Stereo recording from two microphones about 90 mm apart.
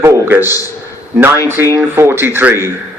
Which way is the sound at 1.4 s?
30° right (ahead or behind).